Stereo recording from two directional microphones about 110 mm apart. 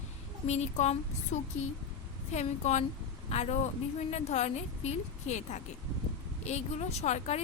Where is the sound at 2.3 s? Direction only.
90° left.